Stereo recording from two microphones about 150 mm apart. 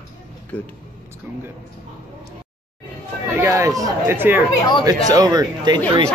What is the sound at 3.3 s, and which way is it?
Speech, 20° right (ahead or behind).